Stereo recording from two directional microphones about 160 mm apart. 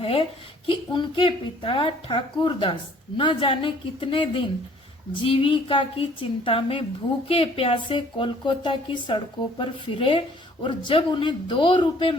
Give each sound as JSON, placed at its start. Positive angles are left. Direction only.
{"t": 0.0, "sound": "speech", "side_deg": 35}